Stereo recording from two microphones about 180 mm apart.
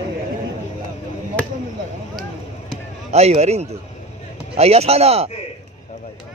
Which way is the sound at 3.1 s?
35° right (ahead or behind).